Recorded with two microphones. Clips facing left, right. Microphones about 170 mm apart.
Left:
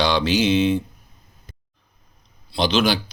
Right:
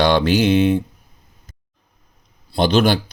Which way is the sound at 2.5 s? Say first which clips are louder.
Right 4 dB; 50° right (ahead or behind).